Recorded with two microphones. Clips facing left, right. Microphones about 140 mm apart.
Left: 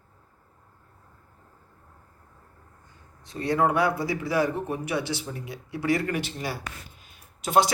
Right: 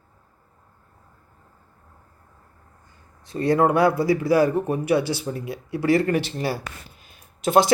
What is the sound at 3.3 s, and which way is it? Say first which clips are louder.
Speech: right 5 dB; 45° right (ahead or behind).